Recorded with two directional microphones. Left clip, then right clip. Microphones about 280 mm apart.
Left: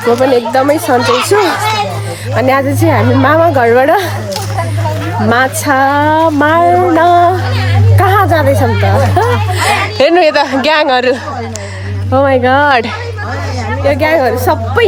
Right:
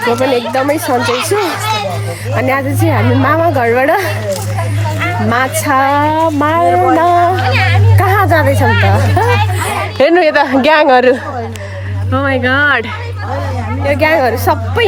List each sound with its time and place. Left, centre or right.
0.2 s a woman's voice: centre
5.3 s speech: centre
7.4 s music: right
7.9 s speech: centre
13.8 s speech: centre